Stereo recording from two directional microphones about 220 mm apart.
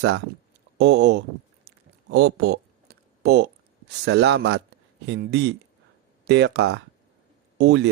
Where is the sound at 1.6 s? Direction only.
50° right (ahead or behind).